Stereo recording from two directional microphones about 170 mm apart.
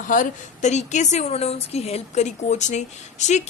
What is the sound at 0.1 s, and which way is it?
A woman's voice, 45° left (ahead or behind).